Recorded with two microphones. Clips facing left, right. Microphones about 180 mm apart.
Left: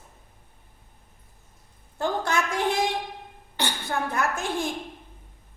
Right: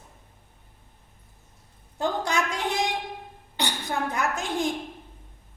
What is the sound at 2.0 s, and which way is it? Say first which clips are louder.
Speech: even; 20° right (ahead or behind).